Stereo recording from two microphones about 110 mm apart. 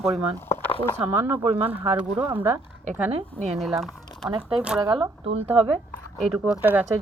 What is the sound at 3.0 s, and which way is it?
Speech, 65° right (ahead or behind).